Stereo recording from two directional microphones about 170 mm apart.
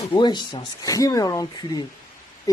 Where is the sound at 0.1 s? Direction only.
25° left (ahead or behind).